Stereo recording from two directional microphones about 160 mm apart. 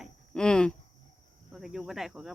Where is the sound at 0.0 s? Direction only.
5° left (ahead or behind).